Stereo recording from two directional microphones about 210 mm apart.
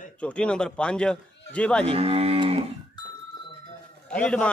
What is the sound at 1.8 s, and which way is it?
Speech, 25° right (ahead or behind).